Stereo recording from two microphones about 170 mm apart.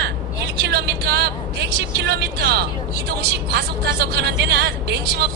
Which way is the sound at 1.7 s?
75° right (ahead or behind).